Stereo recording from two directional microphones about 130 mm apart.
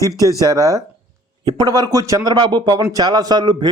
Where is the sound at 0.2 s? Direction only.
25° right (ahead or behind).